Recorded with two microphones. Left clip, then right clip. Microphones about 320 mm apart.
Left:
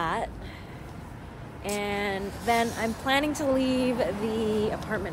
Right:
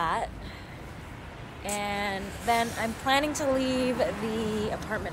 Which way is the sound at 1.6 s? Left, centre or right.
Centre.